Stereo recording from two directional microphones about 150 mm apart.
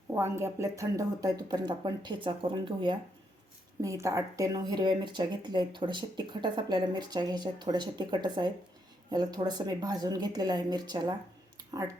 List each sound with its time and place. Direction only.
0.1 s speech: 20° right (ahead or behind)
3.8 s speech: 20° right (ahead or behind)